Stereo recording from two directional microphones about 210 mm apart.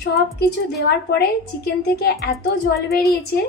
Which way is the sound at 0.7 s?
50° left (ahead or behind).